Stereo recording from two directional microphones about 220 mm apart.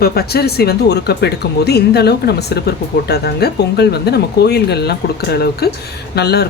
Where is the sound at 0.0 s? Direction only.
45° left (ahead or behind).